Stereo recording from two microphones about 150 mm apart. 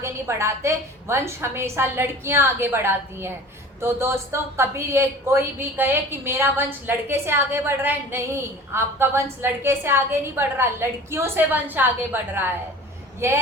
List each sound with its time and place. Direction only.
0.0 s speech: 20° right (ahead or behind)